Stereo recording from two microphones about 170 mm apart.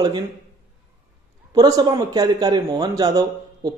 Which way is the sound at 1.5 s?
20° right (ahead or behind).